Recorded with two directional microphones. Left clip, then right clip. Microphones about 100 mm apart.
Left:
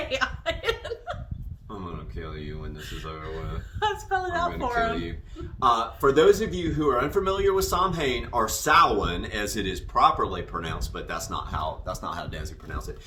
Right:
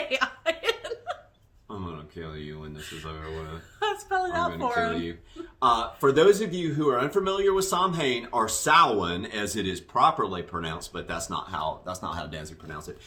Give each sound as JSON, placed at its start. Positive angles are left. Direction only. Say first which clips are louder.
{"t": 0.1, "sound": "chuckle", "louder": "right 2 dB", "side_deg": -65}
{"t": 1.7, "sound": "a sound", "louder": "even", "side_deg": -10}
{"t": 2.7, "sound": "speech", "louder": "left 2 dB", "side_deg": -55}
{"t": 4.9, "sound": "speech", "louder": "even", "side_deg": -15}